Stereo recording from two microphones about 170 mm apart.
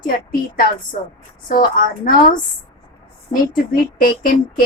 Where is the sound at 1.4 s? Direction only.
55° left (ahead or behind).